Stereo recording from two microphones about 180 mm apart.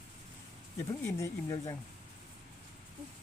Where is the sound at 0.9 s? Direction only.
15° left (ahead or behind).